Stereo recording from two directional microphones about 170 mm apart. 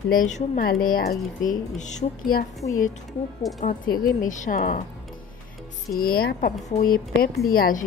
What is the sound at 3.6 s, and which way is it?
A woman's voice, 55° left (ahead or behind).